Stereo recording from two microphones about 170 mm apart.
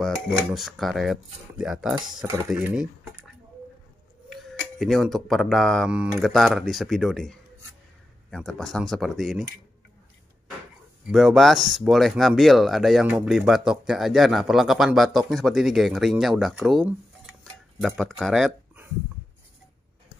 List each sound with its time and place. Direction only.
0.0 s a sound: centre (ahead or behind)
0.5 s speech: centre (ahead or behind)
4.3 s speech: centre (ahead or behind)
11.1 s speech: centre (ahead or behind)